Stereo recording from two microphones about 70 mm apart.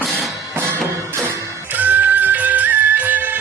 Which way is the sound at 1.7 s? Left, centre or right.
Right.